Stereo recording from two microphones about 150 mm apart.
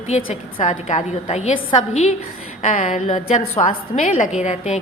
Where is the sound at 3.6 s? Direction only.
40° left (ahead or behind).